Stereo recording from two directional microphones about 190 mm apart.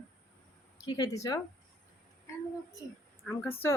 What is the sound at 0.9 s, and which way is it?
Speech, 20° left (ahead or behind).